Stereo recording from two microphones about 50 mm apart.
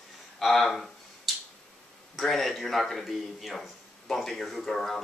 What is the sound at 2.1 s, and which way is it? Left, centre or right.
Speech, centre.